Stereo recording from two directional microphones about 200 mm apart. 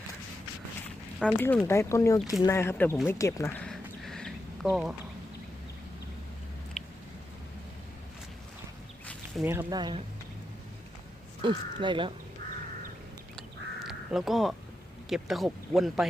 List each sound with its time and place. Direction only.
1.2 s speech: 5° left (ahead or behind)
3.6 s duck: centre (ahead or behind)
6.8 s a sound: 5° left (ahead or behind)
9.4 s speech: 10° right (ahead or behind)
11.4 s speech: 25° right (ahead or behind)
13.8 s crow: centre (ahead or behind)
15.1 s speech: centre (ahead or behind)